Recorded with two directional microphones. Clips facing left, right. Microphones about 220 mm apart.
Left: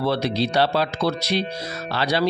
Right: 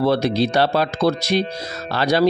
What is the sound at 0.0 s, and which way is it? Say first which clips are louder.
Speech: right 4 dB; 45° right (ahead or behind).